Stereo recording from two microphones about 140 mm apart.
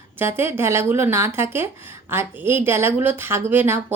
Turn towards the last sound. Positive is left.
turn(degrees=-15)  # may be behind; listen again after turning